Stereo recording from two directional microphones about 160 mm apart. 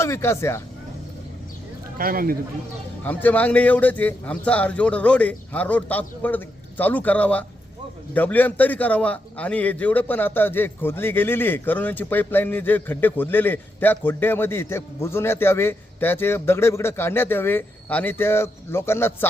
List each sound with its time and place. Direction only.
0.0 s a man's voice: 15° left (ahead or behind)
2.0 s a man's voice: 65° right (ahead or behind)
3.0 s a man's voice: 10° left (ahead or behind)